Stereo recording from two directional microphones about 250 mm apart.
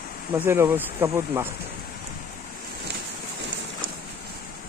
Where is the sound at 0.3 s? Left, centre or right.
Centre.